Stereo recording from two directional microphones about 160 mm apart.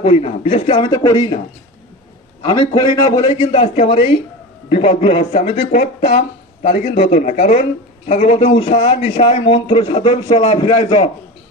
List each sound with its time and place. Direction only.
0.0 s a man's voice: 40° left (ahead or behind)
0.8 s speech: 25° left (ahead or behind)
2.4 s a man's voice: 25° left (ahead or behind)
3.3 s a man's voice: 45° left (ahead or behind)
5.7 s speech: 55° left (ahead or behind)
9.2 s a man's voice: 35° left (ahead or behind)